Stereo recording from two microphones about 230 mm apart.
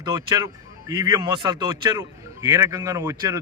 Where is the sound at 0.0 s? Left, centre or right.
Centre.